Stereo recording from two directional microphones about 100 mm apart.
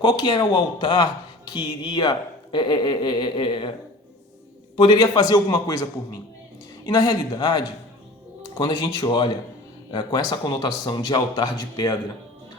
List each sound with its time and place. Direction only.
0.0 s speech: 50° left (ahead or behind)
4.8 s a man's voice: 45° left (ahead or behind)